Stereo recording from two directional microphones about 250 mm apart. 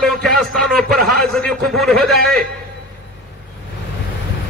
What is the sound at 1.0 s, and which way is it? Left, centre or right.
Speech, right.